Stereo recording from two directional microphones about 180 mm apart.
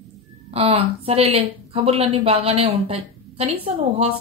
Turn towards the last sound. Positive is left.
turn(degrees=-35)  # may be behind; listen again after turning